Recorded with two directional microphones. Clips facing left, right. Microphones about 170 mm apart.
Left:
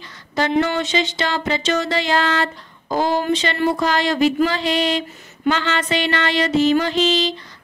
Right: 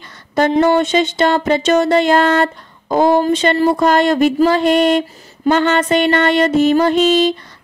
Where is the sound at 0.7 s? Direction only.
50° right (ahead or behind).